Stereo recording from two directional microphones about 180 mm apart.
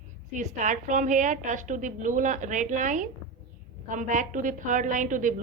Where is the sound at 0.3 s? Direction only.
45° right (ahead or behind).